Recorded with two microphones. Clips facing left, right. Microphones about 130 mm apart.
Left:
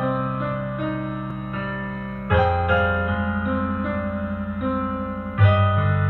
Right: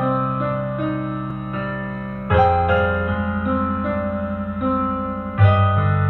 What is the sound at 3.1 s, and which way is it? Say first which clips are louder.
Music: right 2 dB; 35° right (ahead or behind).